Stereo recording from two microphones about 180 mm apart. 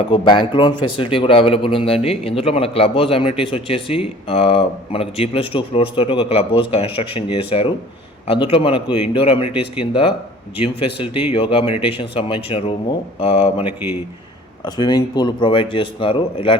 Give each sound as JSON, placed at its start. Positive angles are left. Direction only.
{"t": 0.1, "sound": "speech", "side_deg": 25}
{"t": 14.8, "sound": "speech", "side_deg": 20}